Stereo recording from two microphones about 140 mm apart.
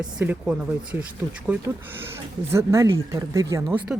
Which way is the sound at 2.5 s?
20° right (ahead or behind).